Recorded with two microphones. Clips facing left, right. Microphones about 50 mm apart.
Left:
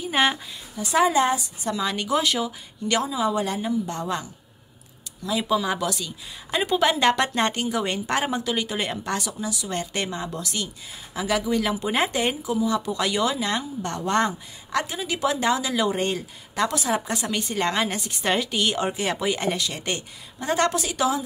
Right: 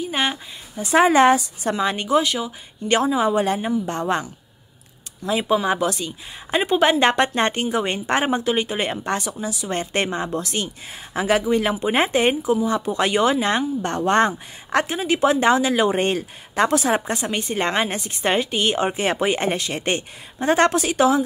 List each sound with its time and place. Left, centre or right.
0.0 s speech: centre
0.7 s speech: right
1.1 s a woman's voice: right
1.7 s speech: right
2.0 s speech: centre
3.0 s speech: right
17.1 s speech: right